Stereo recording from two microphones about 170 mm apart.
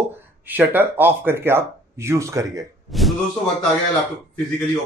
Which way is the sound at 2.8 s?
Centre (ahead or behind).